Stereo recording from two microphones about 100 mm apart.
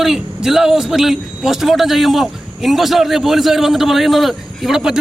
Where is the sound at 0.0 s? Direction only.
5° right (ahead or behind).